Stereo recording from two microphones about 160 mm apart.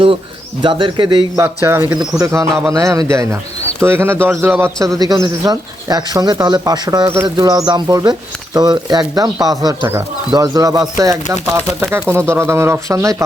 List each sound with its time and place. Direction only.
0.6 s speech: 30° right (ahead or behind)
1.4 s a man's voice: 15° right (ahead or behind)